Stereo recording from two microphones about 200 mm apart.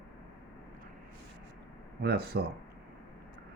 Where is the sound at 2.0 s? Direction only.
50° right (ahead or behind).